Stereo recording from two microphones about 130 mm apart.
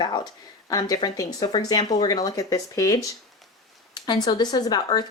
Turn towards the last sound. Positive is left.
turn(degrees=30)  # may be behind; listen again after turning